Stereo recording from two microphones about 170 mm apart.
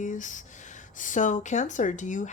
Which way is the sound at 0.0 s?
45° left (ahead or behind).